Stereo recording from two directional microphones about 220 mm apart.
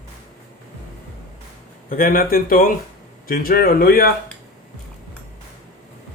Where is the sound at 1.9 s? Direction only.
40° left (ahead or behind).